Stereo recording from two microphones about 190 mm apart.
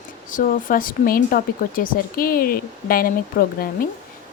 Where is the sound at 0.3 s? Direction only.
45° left (ahead or behind).